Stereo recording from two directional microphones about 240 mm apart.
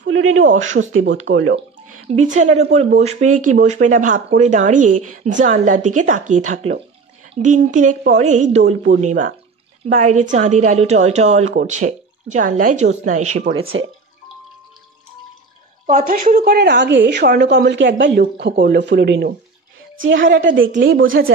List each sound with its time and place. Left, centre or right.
0.0 s a woman's voice: right
2.0 s a woman's voice: right
13.8 s speech: right
15.9 s a woman's voice: right